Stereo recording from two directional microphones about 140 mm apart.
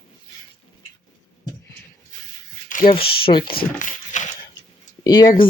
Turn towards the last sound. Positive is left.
turn(degrees=30)  # may be behind; listen again after turning